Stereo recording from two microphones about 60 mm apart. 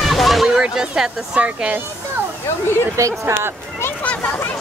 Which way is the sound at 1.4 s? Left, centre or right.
Right.